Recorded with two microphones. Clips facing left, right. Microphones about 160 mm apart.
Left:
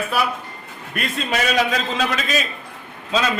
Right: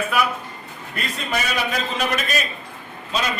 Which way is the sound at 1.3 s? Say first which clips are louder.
Left 4 dB; 90° left.